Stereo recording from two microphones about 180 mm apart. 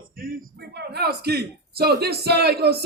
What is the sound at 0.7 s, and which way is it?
Speech, 65° right (ahead or behind).